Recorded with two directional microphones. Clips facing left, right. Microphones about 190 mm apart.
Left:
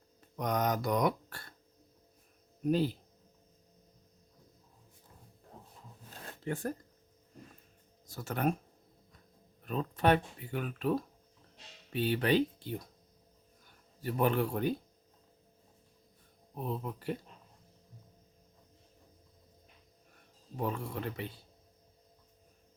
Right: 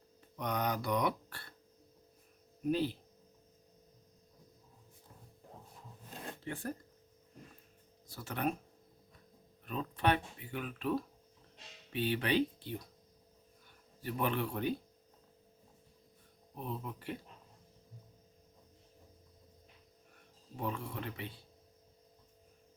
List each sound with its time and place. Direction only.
0.3 s mantra: 45° left (ahead or behind)
2.6 s speech: 40° left (ahead or behind)
6.4 s speech: 45° left (ahead or behind)
8.0 s speech: 45° left (ahead or behind)
9.6 s speech: 40° left (ahead or behind)
14.0 s speech: 40° left (ahead or behind)
16.6 s speech: 40° left (ahead or behind)
20.6 s speech: 40° left (ahead or behind)